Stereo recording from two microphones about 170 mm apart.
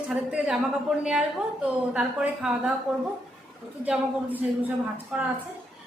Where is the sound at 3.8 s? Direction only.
10° right (ahead or behind).